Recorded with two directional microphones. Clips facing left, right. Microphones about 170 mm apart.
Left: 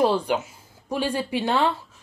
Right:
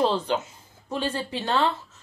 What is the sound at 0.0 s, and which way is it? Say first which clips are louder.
Speech: left 2 dB; 10° left (ahead or behind).